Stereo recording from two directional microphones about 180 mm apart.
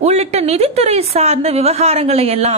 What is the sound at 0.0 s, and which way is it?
A woman's voice, 35° right (ahead or behind).